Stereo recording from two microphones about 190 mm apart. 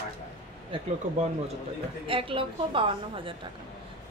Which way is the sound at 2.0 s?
25° right (ahead or behind).